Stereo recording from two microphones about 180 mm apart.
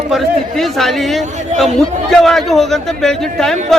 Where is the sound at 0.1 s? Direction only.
Centre (ahead or behind).